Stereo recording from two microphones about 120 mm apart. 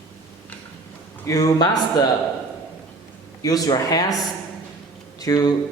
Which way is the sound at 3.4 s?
30° left (ahead or behind).